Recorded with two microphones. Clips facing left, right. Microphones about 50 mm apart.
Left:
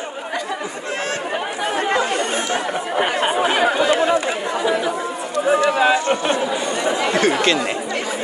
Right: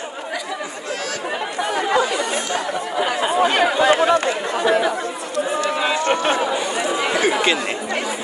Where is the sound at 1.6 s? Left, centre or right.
Left.